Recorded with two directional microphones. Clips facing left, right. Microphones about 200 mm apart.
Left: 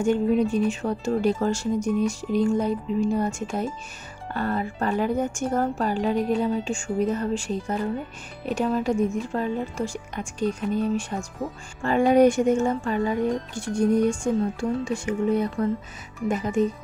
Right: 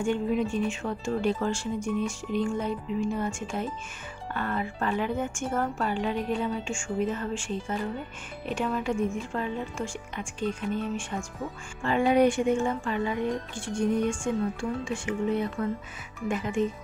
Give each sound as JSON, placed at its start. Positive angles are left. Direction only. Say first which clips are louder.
{"t": 0.0, "sound": "speech", "louder": "left 5 dB", "side_deg": 40}